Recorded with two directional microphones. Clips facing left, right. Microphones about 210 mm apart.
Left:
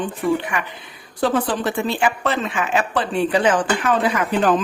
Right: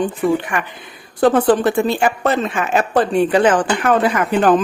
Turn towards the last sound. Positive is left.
turn(degrees=-55)  # may be behind; listen again after turning